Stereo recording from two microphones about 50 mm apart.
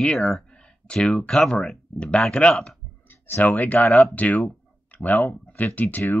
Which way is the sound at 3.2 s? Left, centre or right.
Left.